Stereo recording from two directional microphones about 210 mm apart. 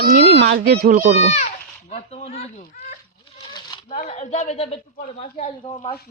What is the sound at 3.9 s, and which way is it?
Speech, 35° left (ahead or behind).